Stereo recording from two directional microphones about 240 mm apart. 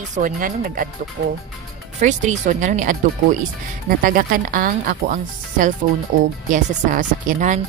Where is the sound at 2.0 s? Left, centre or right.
Right.